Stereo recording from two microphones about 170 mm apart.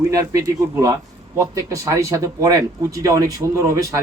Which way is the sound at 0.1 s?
20° right (ahead or behind).